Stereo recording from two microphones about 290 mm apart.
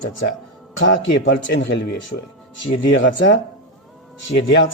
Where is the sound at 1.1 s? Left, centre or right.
Left.